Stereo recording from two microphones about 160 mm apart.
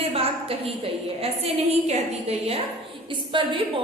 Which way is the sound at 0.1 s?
35° right (ahead or behind).